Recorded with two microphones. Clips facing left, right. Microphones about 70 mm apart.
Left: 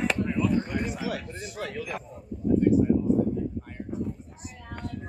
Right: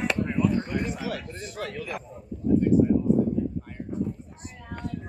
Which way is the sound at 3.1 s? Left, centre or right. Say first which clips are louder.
Right 1 dB; centre.